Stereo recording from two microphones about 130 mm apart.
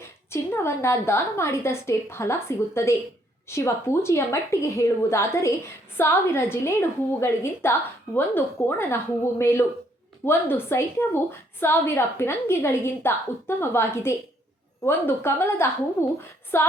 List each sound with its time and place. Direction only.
0.3 s a woman's voice: 20° left (ahead or behind)